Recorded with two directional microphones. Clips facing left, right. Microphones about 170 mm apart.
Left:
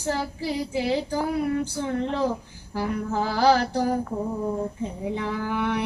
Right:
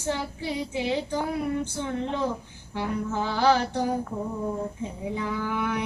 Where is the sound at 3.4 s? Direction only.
35° left (ahead or behind).